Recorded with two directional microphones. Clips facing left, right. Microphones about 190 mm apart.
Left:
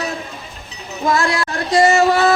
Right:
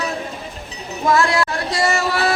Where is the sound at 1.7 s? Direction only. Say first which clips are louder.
Left 10 dB; 45° left (ahead or behind).